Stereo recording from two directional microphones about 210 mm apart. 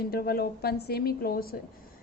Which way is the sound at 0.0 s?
45° left (ahead or behind).